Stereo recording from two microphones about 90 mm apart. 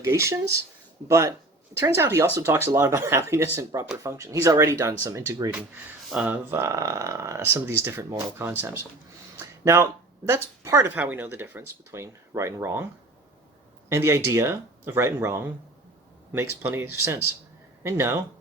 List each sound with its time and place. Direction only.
0.0 s speech: 35° right (ahead or behind)
6.2 s speech: 25° right (ahead or behind)
13.9 s speech: 30° right (ahead or behind)